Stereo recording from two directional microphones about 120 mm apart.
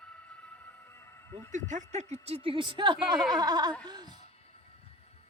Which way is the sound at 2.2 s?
50° right (ahead or behind).